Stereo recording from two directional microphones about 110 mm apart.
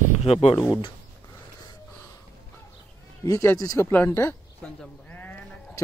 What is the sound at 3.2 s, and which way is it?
Speech, 30° left (ahead or behind).